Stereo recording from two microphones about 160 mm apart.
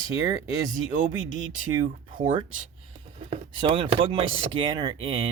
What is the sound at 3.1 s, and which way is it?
Speech, 35° right (ahead or behind).